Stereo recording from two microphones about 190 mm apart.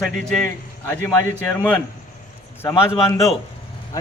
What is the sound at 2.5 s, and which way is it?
Speech, 15° left (ahead or behind).